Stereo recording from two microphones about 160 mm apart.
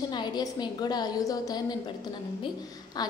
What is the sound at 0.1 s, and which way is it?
A woman's voice, 25° left (ahead or behind).